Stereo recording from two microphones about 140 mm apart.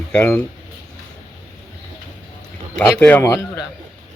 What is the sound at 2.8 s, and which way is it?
Speech, 10° left (ahead or behind).